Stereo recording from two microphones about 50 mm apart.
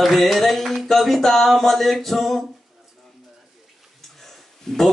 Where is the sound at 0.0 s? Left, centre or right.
Centre.